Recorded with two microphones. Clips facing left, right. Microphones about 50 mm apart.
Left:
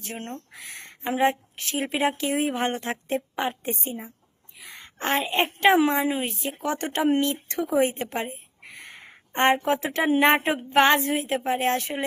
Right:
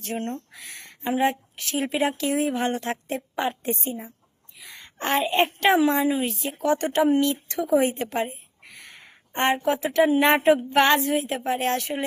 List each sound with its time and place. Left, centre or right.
0.1 s speech: centre
0.5 s speech: left
3.2 s a woman's voice: left
4.5 s a sound: left
5.0 s speech: centre
5.5 s a woman's voice: left